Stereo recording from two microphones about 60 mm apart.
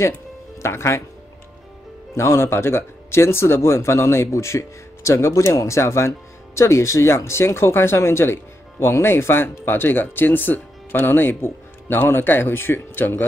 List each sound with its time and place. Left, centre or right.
0.6 s speech: left
2.1 s speech: left